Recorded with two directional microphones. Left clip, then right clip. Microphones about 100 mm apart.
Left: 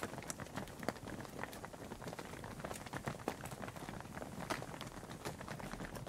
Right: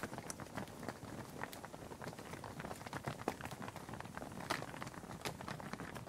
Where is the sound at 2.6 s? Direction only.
15° left (ahead or behind).